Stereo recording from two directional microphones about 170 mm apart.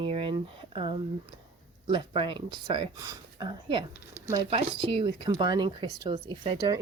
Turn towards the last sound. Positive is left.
turn(degrees=-25)  # may be behind; listen again after turning